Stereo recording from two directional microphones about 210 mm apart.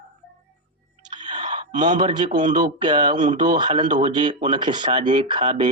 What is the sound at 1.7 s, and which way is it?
Speech, 35° right (ahead or behind).